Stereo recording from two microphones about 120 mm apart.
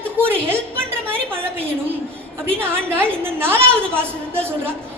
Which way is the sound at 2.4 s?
20° right (ahead or behind).